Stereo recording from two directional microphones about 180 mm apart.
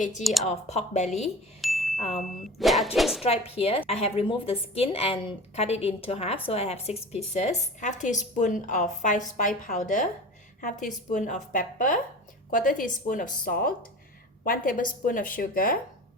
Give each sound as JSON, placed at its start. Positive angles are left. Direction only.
{"t": 0.2, "sound": "speech", "side_deg": 0}
{"t": 0.4, "sound": "a woman's voice", "side_deg": 40}
{"t": 1.6, "sound": "a sound", "side_deg": 0}
{"t": 2.0, "sound": "speech", "side_deg": 0}
{"t": 3.2, "sound": "a woman's voice", "side_deg": 35}